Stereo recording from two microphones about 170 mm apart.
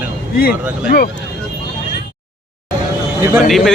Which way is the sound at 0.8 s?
60° left (ahead or behind).